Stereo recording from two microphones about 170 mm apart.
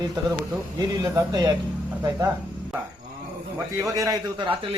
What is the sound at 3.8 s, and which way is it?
Speech, 20° right (ahead or behind).